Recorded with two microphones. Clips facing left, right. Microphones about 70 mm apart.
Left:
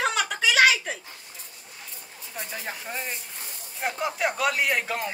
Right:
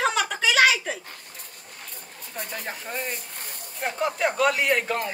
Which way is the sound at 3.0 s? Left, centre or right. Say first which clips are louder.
Right 2 dB; right.